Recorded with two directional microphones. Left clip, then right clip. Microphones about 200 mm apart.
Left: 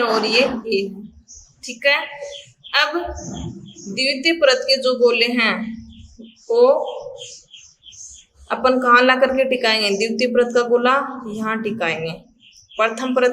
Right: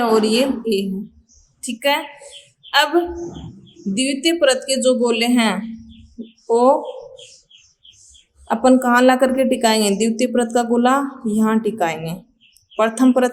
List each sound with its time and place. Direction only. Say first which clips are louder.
0.0 s a woman's voice: even; 35° right (ahead or behind)
2.6 s a sound: right 2 dB; 35° right (ahead or behind)
3.9 s a woman's voice: left 1 dB; 35° right (ahead or behind)
8.4 s a woman's voice: even; 30° right (ahead or behind)